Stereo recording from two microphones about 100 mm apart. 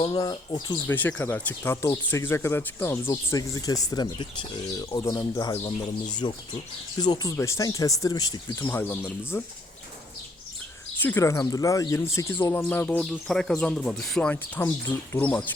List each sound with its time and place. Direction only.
0.1 s speech: 45° left (ahead or behind)
0.9 s speech: 15° left (ahead or behind)
1.7 s speech: 30° left (ahead or behind)
3.3 s speech: 35° left (ahead or behind)
6.2 s speech: 50° left (ahead or behind)
8.5 s speech: 25° left (ahead or behind)
11.2 s speech: 30° left (ahead or behind); by 13.1 s 15° left (ahead or behind)
13.2 s speech: 5° left (ahead or behind)